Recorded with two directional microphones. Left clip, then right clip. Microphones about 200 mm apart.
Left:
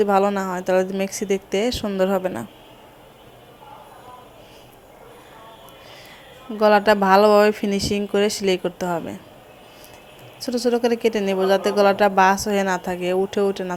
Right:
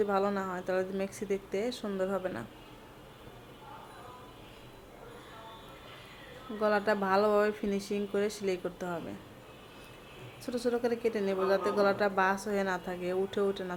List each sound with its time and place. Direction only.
0.0 s speech: 35° left (ahead or behind)
6.6 s speech: 40° left (ahead or behind)
10.4 s speech: 35° left (ahead or behind)